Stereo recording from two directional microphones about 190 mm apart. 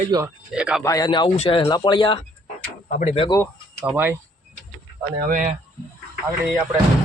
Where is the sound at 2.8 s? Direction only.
45° left (ahead or behind).